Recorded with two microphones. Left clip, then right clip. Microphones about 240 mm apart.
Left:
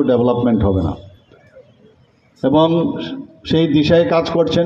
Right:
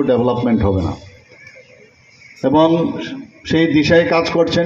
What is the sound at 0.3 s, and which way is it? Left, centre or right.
Speech, left.